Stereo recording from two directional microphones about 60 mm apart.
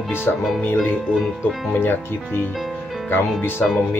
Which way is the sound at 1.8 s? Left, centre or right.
Left.